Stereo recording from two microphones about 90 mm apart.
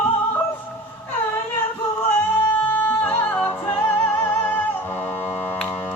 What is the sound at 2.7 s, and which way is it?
Music, 20° left (ahead or behind).